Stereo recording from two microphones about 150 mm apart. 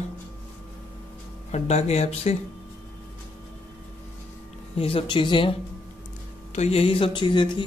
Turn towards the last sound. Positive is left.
turn(degrees=35)  # may be behind; listen again after turning